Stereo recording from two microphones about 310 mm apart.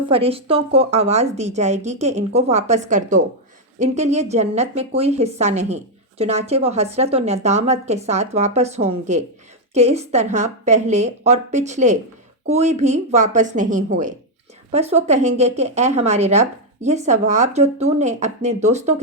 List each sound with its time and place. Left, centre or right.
0.0 s speech: centre